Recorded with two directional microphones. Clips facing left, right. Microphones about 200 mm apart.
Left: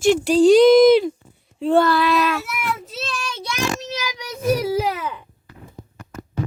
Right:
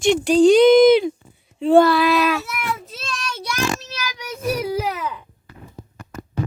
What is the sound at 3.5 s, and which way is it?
Child singing, 20° left (ahead or behind).